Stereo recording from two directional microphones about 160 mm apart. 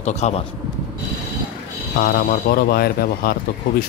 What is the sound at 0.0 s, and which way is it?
Speech, 45° left (ahead or behind).